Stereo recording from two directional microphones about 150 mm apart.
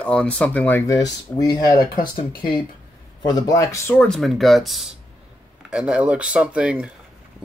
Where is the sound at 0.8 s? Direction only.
25° left (ahead or behind).